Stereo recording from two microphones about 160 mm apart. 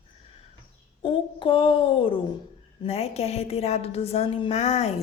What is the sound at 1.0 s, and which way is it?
A woman's voice, 35° left (ahead or behind).